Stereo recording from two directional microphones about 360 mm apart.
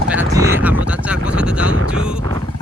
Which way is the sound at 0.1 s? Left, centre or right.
Centre.